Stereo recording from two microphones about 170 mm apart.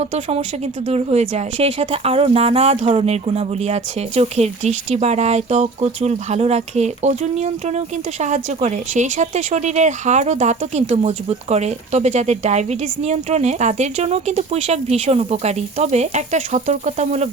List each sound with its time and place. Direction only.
0.0 s speech: 40° right (ahead or behind)